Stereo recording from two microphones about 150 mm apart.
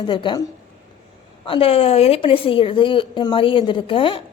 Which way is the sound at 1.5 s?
40° left (ahead or behind).